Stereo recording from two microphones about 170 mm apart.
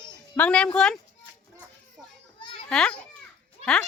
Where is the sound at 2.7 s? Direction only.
5° left (ahead or behind).